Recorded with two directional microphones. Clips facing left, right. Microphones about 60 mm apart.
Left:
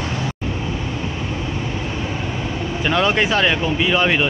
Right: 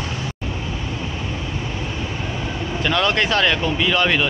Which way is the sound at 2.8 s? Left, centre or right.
Centre.